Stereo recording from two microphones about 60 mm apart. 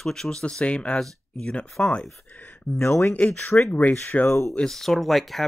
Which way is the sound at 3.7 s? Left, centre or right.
Left.